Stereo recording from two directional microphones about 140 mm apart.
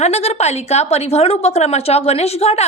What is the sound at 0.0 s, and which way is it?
A woman's voice, 50° left (ahead or behind).